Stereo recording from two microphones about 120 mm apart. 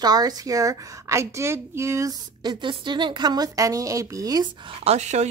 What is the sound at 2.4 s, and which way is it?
Speech, 40° right (ahead or behind).